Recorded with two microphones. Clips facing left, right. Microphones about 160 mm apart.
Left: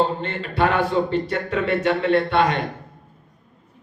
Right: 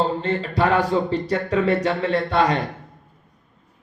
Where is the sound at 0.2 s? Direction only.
35° right (ahead or behind).